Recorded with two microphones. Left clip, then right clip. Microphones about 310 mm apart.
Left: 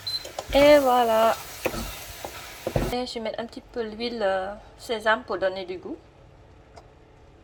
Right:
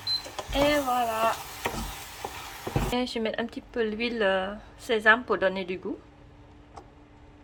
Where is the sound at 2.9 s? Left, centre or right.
Centre.